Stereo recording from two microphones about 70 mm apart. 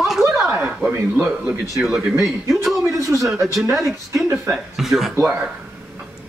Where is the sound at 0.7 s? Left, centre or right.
Centre.